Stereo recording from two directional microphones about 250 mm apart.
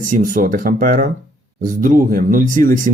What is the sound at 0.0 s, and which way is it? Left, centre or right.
Speech, right.